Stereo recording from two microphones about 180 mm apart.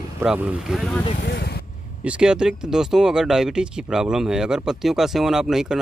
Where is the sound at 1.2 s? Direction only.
65° left (ahead or behind).